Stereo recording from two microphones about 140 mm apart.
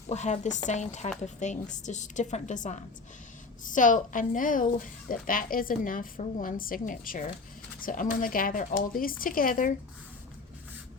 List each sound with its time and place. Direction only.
0.1 s a woman's voice: 60° left (ahead or behind); by 9.7 s 80° left